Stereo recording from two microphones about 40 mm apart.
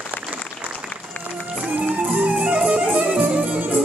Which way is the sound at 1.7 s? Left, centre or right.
Right.